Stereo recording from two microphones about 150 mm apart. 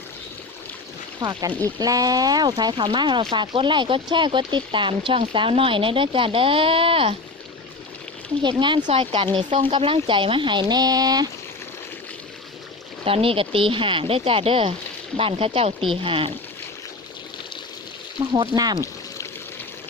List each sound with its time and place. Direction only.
1.2 s speech: 30° right (ahead or behind)
8.4 s speech: 30° right (ahead or behind)
13.1 s speech: 40° right (ahead or behind)
18.3 s speech: 25° right (ahead or behind)